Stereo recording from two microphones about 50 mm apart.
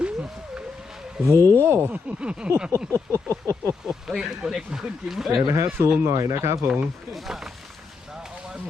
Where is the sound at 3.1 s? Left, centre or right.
Right.